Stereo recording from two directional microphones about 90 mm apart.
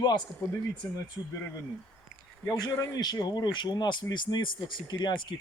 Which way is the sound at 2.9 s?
50° left (ahead or behind).